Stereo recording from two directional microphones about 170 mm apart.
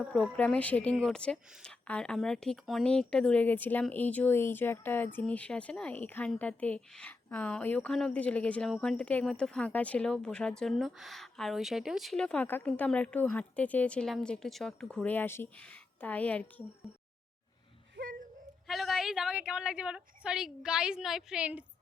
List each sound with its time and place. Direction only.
0.1 s speech: 5° left (ahead or behind)
17.9 s a sound: 55° right (ahead or behind)
18.7 s a woman's voice: centre (ahead or behind)